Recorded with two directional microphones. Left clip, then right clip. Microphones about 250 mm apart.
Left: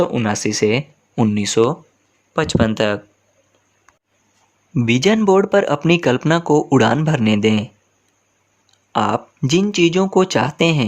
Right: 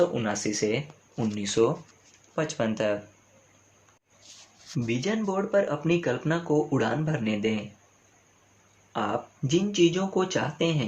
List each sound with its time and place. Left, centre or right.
0.1 s speech: left
4.9 s speech: left
8.9 s speech: left